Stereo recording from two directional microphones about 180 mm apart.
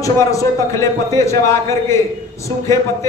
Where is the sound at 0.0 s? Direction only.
20° left (ahead or behind).